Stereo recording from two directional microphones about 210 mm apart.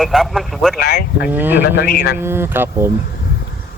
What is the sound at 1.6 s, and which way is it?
Speech, 45° left (ahead or behind).